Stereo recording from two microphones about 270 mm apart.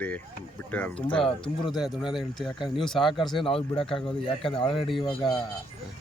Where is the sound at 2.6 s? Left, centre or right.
Centre.